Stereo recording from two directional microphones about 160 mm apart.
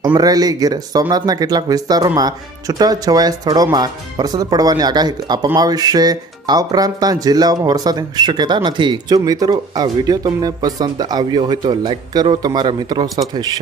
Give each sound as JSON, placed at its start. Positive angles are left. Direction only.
{"t": 0.0, "sound": "speech", "side_deg": -25}